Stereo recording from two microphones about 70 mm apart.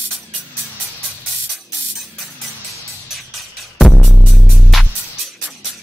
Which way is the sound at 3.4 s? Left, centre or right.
Centre.